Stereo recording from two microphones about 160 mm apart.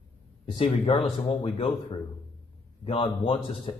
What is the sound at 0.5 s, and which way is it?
Speech, 40° left (ahead or behind).